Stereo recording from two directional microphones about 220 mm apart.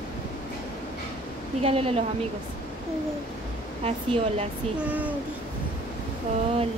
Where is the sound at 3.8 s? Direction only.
30° right (ahead or behind).